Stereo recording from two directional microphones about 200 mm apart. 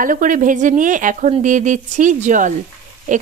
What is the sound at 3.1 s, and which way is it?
Pig, 40° right (ahead or behind).